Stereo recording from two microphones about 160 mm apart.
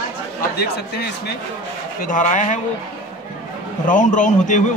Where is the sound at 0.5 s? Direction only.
90° left.